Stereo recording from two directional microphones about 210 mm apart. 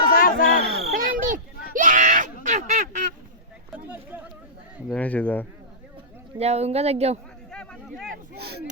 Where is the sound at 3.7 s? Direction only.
5° right (ahead or behind).